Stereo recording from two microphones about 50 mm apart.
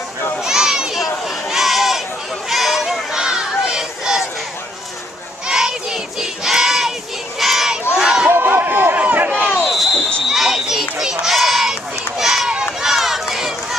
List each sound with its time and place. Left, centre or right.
0.4 s a sound: centre
2.5 s crowd: centre
5.5 s crowd: centre
7.9 s crowd: centre
8.3 s a sound: right
8.9 s a sound: right
9.7 s basketball bounce: centre
10.2 s children playing: centre
12.2 s run: centre
13.3 s crowd: centre